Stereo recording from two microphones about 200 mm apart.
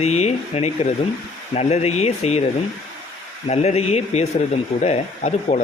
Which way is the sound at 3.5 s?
30° left (ahead or behind).